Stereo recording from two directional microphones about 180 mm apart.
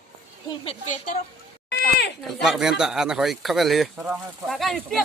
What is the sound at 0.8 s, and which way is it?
Speech, 45° left (ahead or behind).